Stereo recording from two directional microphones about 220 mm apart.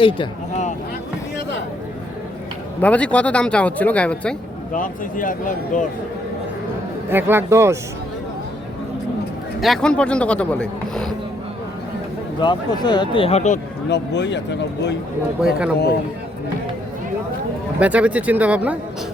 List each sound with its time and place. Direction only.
0.0 s speech: 25° left (ahead or behind)
2.8 s speech: 5° left (ahead or behind)
4.7 s speech: 35° left (ahead or behind)
7.1 s speech: 10° right (ahead or behind)
9.6 s speech: centre (ahead or behind)
12.4 s speech: 20° left (ahead or behind)
13.9 s speech: 50° left (ahead or behind)
15.4 s speech: 5° right (ahead or behind)
17.7 s speech: 5° right (ahead or behind)